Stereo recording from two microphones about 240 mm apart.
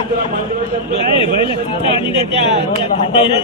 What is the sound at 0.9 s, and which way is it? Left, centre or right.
Speech, left.